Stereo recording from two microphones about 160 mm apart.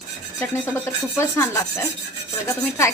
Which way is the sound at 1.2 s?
15° left (ahead or behind).